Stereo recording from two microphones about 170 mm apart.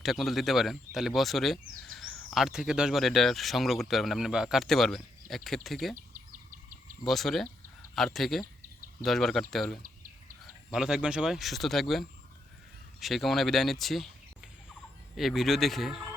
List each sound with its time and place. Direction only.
0.0 s speech: centre (ahead or behind)
7.1 s speech: centre (ahead or behind)
8.6 s a sound: 55° right (ahead or behind)
9.0 s speech: centre (ahead or behind)
15.1 s speech: centre (ahead or behind)